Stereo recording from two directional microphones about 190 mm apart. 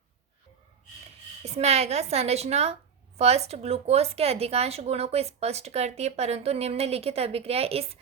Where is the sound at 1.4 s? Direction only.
35° right (ahead or behind).